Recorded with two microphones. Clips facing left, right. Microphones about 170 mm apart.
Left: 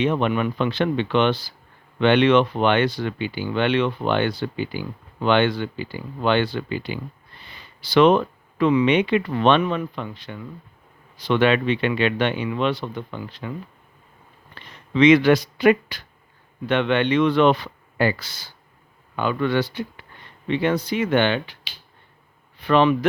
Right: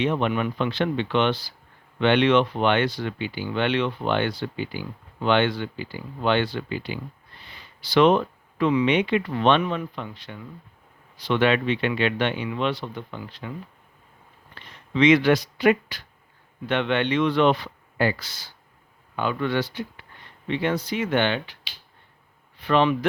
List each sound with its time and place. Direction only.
0.0 s speech: 60° left (ahead or behind)
2.0 s speech: 60° left (ahead or behind); by 7.0 s 75° left (ahead or behind)
7.8 s speech: 65° left (ahead or behind)
12.8 s speech: 80° left
14.9 s speech: 65° left (ahead or behind)
19.1 s speech: 75° left (ahead or behind)
22.6 s speech: 55° left (ahead or behind)